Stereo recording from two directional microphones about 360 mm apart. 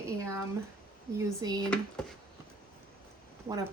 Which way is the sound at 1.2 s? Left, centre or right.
Centre.